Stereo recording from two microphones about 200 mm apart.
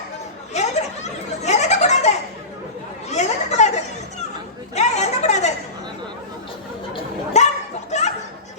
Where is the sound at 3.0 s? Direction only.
35° left (ahead or behind).